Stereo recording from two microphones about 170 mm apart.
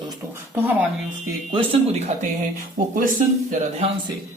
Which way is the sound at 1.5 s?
35° right (ahead or behind).